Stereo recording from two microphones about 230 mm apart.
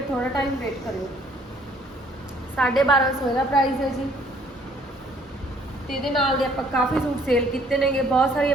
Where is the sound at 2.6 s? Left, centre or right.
Centre.